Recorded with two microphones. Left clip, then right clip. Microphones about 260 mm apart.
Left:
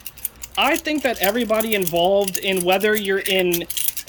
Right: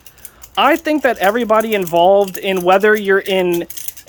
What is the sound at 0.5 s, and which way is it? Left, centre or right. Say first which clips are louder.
Speech: right 6 dB; centre.